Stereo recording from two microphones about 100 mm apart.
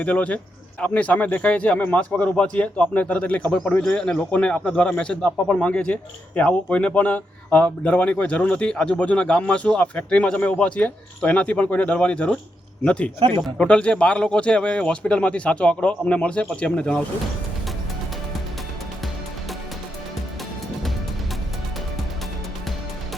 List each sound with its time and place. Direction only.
0.0 s a man's voice: 15° left (ahead or behind)
13.1 s speech: 60° right (ahead or behind)
13.6 s a man's voice: 10° left (ahead or behind)